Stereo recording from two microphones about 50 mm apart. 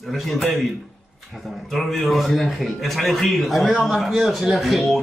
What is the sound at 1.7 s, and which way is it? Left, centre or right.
Speech, centre.